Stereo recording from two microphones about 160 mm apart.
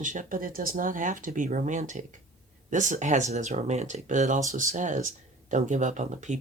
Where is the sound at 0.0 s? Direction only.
55° right (ahead or behind).